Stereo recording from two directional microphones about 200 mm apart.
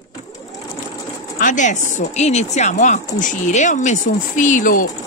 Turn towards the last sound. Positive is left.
turn(degrees=40)  # may be behind; listen again after turning